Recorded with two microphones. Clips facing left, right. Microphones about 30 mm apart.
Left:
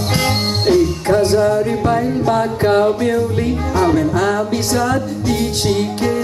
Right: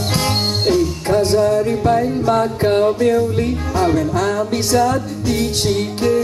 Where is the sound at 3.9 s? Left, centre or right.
Left.